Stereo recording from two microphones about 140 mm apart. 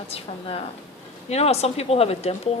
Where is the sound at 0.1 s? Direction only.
40° left (ahead or behind).